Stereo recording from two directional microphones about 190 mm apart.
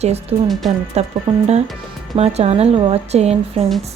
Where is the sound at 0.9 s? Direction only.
35° right (ahead or behind).